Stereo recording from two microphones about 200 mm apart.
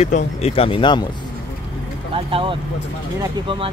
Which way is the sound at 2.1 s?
25° right (ahead or behind).